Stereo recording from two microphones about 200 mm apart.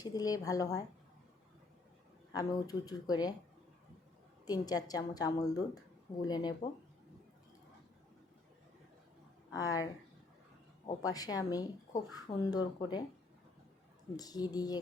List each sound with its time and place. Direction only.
0.0 s speech: 20° left (ahead or behind)
2.3 s a woman's voice: 20° left (ahead or behind)
4.4 s a woman's voice: 20° left (ahead or behind)
9.6 s speech: 15° left (ahead or behind)
11.0 s a woman's voice: 20° left (ahead or behind)
14.2 s a woman's voice: 20° left (ahead or behind)